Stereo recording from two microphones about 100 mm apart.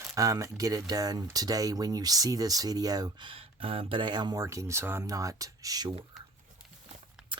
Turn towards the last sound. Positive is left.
turn(degrees=-40)  # may be behind; listen again after turning